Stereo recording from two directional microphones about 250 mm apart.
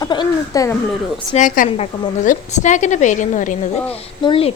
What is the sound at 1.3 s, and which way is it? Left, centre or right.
A woman's voice, left.